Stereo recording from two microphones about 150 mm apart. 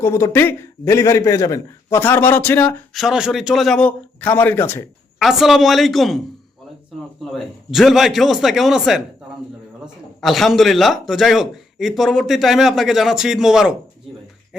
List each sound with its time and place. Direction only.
0.0 s a man's voice: 15° left (ahead or behind)
2.9 s speech: centre (ahead or behind); by 4.9 s 15° left (ahead or behind)
5.2 s speech: centre (ahead or behind)